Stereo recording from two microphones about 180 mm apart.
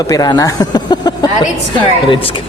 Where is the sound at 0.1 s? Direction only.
20° left (ahead or behind).